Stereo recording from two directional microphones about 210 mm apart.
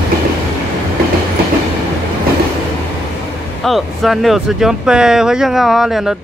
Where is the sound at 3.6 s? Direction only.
Centre (ahead or behind).